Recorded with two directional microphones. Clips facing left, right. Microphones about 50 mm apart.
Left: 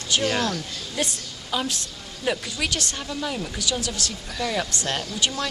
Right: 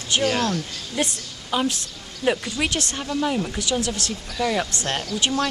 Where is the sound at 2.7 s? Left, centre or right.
Right.